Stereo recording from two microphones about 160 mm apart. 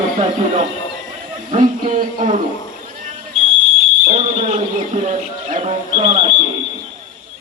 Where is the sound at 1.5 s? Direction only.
50° right (ahead or behind).